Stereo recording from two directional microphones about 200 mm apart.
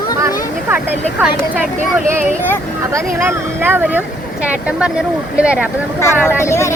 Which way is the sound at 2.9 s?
10° right (ahead or behind).